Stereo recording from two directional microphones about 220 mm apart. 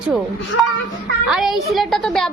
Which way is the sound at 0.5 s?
60° left (ahead or behind).